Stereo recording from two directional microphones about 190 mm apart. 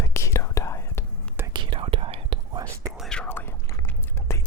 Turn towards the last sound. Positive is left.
turn(degrees=15)  # may be behind; listen again after turning